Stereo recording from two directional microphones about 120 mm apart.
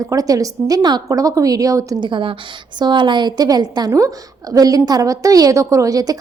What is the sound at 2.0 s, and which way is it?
A woman's voice, 45° right (ahead or behind).